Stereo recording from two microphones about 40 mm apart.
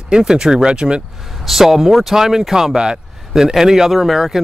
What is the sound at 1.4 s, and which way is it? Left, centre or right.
Speech, centre.